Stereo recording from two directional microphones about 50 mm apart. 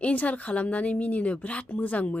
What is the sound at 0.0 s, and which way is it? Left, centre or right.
A woman's voice, left.